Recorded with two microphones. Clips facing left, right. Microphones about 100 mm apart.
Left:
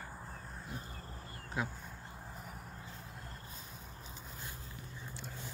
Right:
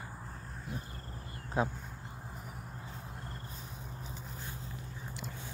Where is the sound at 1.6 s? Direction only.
35° right (ahead or behind).